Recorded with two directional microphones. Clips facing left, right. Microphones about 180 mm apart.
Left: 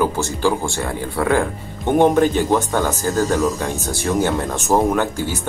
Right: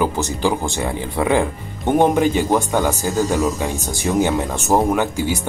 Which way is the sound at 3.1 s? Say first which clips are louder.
Left 2 dB; centre (ahead or behind).